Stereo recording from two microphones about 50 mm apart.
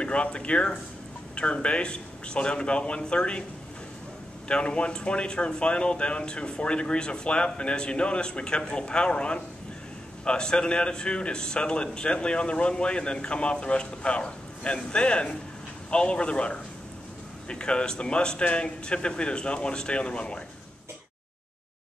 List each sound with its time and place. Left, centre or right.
0.0 s speech: left
4.5 s speech: left